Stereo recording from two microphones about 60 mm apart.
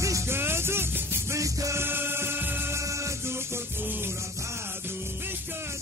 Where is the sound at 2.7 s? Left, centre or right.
Right.